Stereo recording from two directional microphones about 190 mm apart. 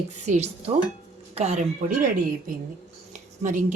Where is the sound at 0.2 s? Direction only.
35° right (ahead or behind).